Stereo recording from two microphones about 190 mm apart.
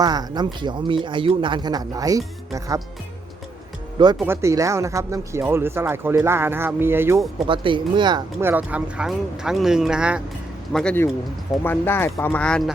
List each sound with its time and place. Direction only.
0.0 s speech: 20° right (ahead or behind)
3.9 s speech: 20° right (ahead or behind)
7.4 s speech: 25° right (ahead or behind)
8.4 s speech: 10° right (ahead or behind)